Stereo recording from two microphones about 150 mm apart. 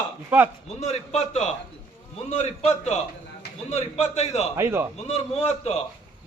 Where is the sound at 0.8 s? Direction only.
45° left (ahead or behind).